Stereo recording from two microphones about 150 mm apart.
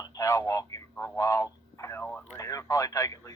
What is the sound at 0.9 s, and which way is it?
Speech, 20° left (ahead or behind).